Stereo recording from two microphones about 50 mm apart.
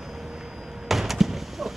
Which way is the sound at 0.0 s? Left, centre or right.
Centre.